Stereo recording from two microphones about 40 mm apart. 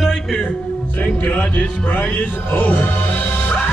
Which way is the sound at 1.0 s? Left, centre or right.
Left.